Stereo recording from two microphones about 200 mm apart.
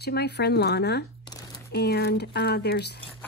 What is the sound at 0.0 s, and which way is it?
Speech, 55° left (ahead or behind).